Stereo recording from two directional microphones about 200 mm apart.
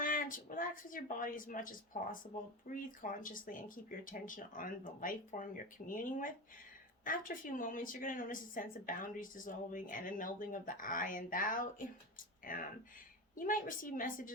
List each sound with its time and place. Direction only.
0.0 s speech: 45° left (ahead or behind)